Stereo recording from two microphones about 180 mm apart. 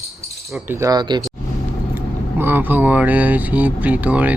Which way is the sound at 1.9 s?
10° right (ahead or behind).